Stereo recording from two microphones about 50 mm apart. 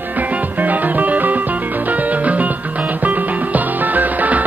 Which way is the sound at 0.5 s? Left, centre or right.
Right.